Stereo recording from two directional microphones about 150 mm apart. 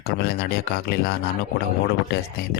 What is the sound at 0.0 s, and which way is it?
Speech, 90° left.